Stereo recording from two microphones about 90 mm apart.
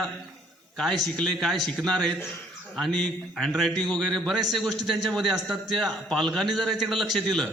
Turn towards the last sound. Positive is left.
turn(degrees=0)  # may be behind; listen again after turning